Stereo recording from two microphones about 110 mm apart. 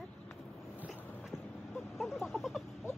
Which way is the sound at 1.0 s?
15° left (ahead or behind).